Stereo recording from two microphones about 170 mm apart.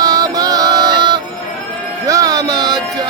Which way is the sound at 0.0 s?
25° right (ahead or behind).